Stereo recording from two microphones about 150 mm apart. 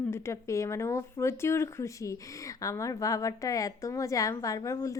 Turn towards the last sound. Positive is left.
turn(degrees=20)  # may be behind; listen again after turning